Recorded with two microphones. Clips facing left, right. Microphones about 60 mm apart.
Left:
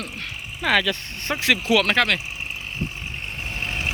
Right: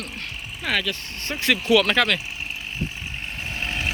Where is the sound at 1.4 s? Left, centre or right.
Left.